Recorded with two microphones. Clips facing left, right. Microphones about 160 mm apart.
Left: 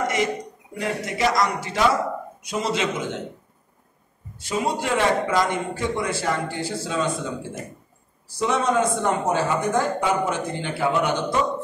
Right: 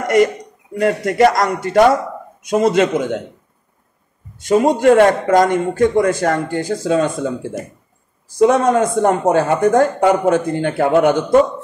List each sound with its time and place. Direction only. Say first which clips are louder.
0.7 s a man's voice: right 11 dB; 55° right (ahead or behind)
4.4 s a man's voice: right 11 dB; 50° right (ahead or behind)
8.4 s a man's voice: right 9 dB; 50° right (ahead or behind)